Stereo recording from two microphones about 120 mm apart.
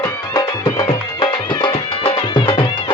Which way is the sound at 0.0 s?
30° left (ahead or behind).